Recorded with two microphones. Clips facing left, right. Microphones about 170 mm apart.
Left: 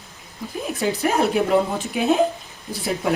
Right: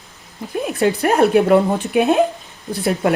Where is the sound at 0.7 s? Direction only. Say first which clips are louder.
Right 5 dB; 60° right (ahead or behind).